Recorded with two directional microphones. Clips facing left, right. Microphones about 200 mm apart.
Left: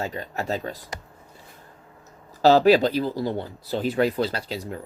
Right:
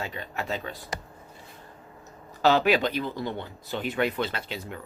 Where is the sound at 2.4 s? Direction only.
35° left (ahead or behind).